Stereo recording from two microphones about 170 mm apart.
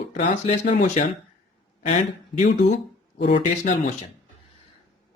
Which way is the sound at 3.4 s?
45° left (ahead or behind).